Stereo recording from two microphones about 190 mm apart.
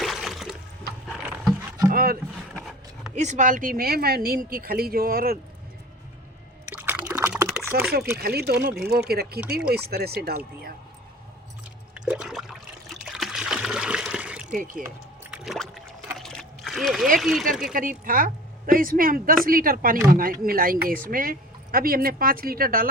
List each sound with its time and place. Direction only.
0.0 s water: centre (ahead or behind)
1.0 s boat: 5° right (ahead or behind)
1.9 s speech: 50° right (ahead or behind)
3.2 s speech: 40° right (ahead or behind)
6.7 s a sound: 10° right (ahead or behind)
7.7 s speech: 50° right (ahead or behind)
11.9 s toilet flush: 5° right (ahead or behind)
13.1 s splash: centre (ahead or behind)
14.5 s speech: 45° right (ahead or behind)
14.8 s rowboat: 5° right (ahead or behind)
16.1 s a sound: centre (ahead or behind)
17.2 s speech: centre (ahead or behind)
17.7 s speech: 45° right (ahead or behind)